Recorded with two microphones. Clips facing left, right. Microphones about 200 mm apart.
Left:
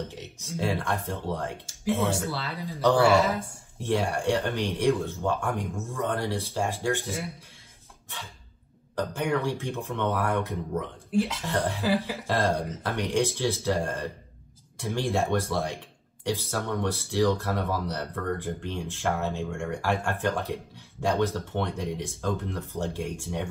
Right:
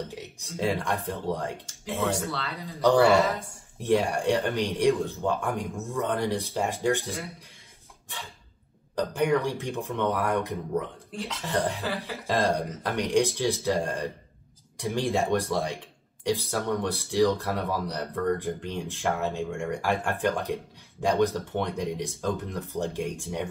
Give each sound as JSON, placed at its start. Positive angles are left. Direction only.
{"t": 0.1, "sound": "speech", "side_deg": -15}
{"t": 2.0, "sound": "speech", "side_deg": 5}
{"t": 3.8, "sound": "speech", "side_deg": -15}
{"t": 8.9, "sound": "speech", "side_deg": -15}